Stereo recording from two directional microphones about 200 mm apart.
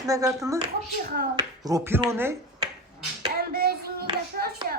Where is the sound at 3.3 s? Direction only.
50° right (ahead or behind).